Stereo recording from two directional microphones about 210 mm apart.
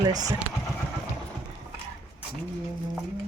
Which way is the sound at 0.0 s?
20° right (ahead or behind).